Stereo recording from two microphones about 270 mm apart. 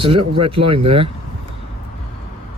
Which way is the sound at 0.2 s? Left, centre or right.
Right.